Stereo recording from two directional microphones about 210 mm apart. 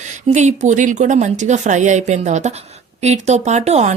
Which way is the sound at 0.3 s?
35° right (ahead or behind).